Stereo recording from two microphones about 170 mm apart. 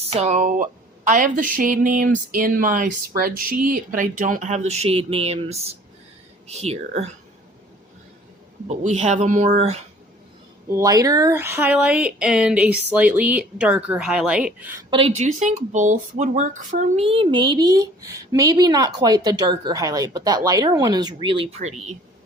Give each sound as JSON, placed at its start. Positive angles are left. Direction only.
{"t": 0.1, "sound": "a woman's voice", "side_deg": -40}
{"t": 8.6, "sound": "speech", "side_deg": -40}
{"t": 10.7, "sound": "speech", "side_deg": -20}
{"t": 14.8, "sound": "speech", "side_deg": -30}
{"t": 15.1, "sound": "speech", "side_deg": -45}